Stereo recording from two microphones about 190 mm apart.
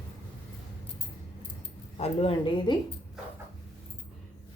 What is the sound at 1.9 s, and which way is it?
Speech, 30° left (ahead or behind).